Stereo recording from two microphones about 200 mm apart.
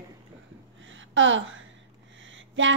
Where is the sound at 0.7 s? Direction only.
70° right (ahead or behind).